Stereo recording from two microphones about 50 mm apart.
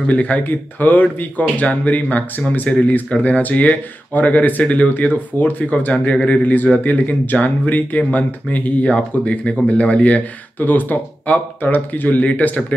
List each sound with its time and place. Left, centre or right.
0.0 s speech: left
10.6 s speech: left